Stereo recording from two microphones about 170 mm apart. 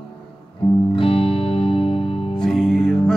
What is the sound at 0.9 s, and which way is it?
Music, 30° left (ahead or behind).